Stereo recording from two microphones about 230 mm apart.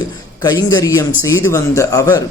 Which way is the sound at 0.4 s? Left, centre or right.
Centre.